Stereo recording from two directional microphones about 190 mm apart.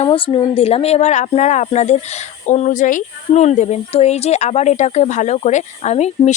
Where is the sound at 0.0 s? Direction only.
25° left (ahead or behind).